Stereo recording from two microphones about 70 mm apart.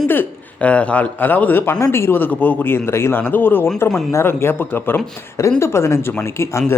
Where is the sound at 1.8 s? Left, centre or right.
Left.